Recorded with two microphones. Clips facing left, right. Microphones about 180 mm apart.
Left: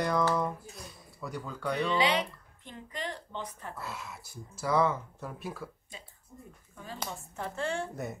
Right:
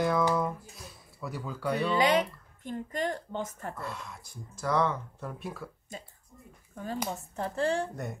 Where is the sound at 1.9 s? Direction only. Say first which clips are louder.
Right 5 dB; 45° right (ahead or behind).